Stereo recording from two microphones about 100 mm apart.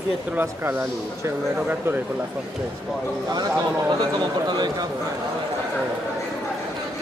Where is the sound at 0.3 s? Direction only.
20° right (ahead or behind).